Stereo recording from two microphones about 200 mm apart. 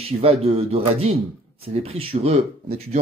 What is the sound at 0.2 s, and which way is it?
Speech, 30° right (ahead or behind).